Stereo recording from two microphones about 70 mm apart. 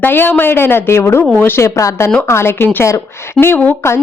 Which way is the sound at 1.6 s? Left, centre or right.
Left.